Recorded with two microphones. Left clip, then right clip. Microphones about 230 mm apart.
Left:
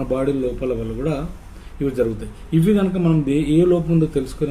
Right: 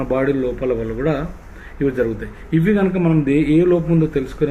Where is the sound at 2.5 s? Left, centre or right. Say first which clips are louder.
Right 1 dB; centre.